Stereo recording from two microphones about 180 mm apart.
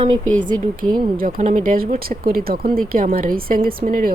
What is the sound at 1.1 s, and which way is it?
A woman's voice, 50° right (ahead or behind).